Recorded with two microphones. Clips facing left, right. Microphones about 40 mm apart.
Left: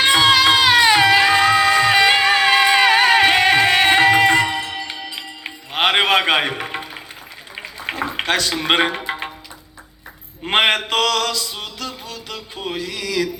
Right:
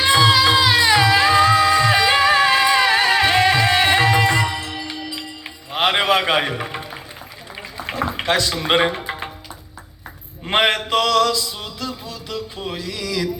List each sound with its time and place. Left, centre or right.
0.0 s music: left
7.5 s a sound: left
8.2 s speech: left
10.4 s mantra: left
10.8 s music: left